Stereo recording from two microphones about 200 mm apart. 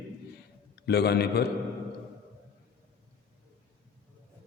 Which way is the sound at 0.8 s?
55° left (ahead or behind).